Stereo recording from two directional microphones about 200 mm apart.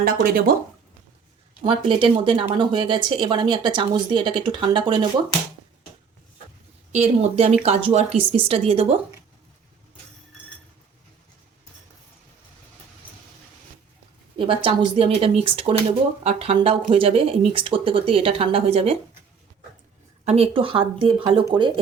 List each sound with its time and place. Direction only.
0.0 s speech: 45° right (ahead or behind)
1.6 s speech: 25° right (ahead or behind)
6.9 s a woman's voice: 30° right (ahead or behind)
14.3 s speech: 25° right (ahead or behind)
20.2 s speech: 30° right (ahead or behind)